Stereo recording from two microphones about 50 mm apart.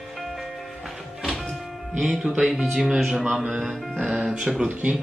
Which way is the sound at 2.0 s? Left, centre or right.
Right.